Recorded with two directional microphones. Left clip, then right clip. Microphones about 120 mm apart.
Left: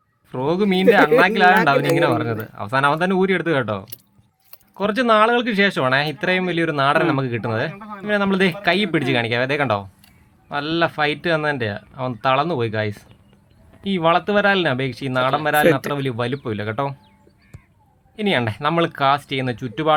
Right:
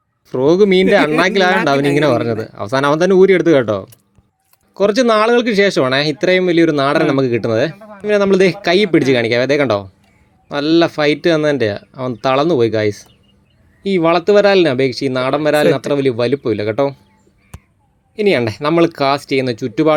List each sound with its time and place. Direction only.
0.3 s speech: 30° right (ahead or behind)
18.2 s speech: 25° right (ahead or behind)